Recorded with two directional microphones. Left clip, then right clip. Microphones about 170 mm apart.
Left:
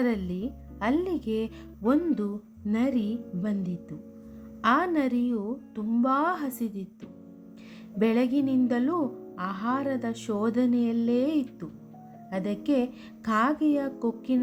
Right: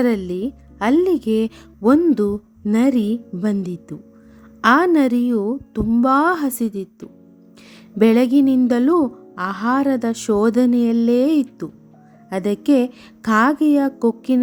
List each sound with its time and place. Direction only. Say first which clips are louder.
0.0 s speech: right 10 dB; 45° right (ahead or behind)
7.9 s speech: right 11 dB; 45° right (ahead or behind)